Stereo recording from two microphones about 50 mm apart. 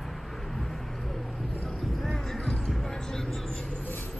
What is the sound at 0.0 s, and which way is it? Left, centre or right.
Vehicle, centre.